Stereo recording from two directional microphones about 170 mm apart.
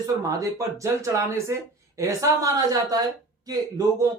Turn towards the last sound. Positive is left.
turn(degrees=-20)  # may be behind; listen again after turning